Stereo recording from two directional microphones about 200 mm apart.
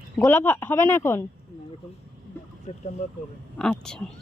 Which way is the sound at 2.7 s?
35° left (ahead or behind).